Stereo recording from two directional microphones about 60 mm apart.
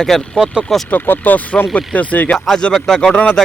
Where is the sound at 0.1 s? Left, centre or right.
Centre.